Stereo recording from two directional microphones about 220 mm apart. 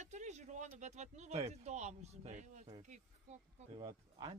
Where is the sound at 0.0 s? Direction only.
30° right (ahead or behind).